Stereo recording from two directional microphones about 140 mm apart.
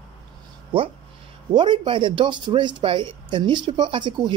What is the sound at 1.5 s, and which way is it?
Speech, 35° right (ahead or behind).